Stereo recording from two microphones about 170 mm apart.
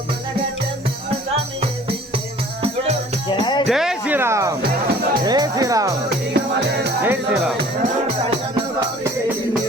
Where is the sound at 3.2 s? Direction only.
25° left (ahead or behind).